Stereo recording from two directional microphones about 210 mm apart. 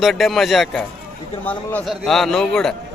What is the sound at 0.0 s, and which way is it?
A man's voice, centre (ahead or behind).